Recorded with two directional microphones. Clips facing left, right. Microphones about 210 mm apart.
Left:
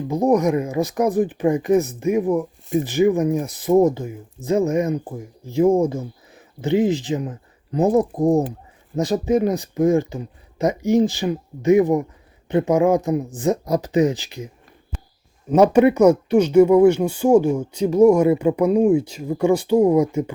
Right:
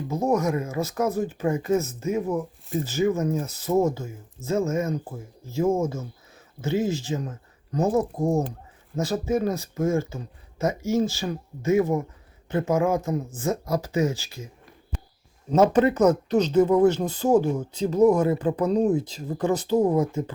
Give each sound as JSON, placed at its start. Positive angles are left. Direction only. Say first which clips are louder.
{"t": 0.1, "sound": "speech", "louder": "left 6 dB", "side_deg": 15}